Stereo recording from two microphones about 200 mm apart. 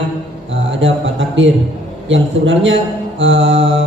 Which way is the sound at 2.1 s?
70° right (ahead or behind).